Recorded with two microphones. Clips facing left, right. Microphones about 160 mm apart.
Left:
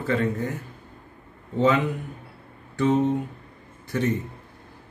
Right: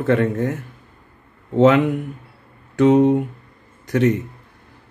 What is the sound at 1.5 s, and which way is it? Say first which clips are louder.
Speech: right 8 dB; 70° right (ahead or behind).